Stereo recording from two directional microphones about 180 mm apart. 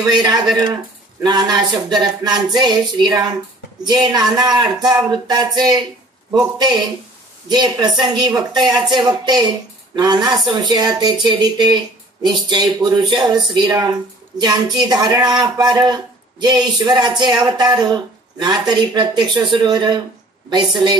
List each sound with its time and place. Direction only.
0.1 s speech: 25° right (ahead or behind)